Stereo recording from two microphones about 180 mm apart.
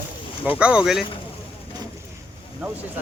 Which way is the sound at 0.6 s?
5° right (ahead or behind).